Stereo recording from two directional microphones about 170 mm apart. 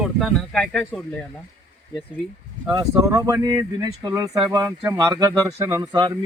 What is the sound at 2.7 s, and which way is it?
Speech, 20° right (ahead or behind).